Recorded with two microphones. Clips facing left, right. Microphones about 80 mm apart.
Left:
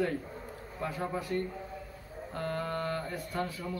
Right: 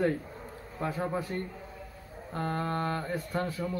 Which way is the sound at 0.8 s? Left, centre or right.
Right.